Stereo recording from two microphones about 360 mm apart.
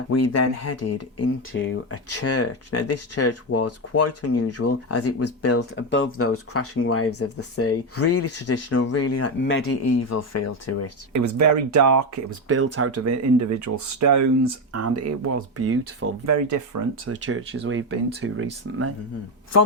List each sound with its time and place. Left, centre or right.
0.1 s speech: left
11.1 s speech: right
12.5 s speech: right
17.1 s speech: right